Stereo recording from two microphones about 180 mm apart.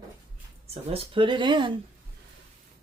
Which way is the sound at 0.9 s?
30° right (ahead or behind).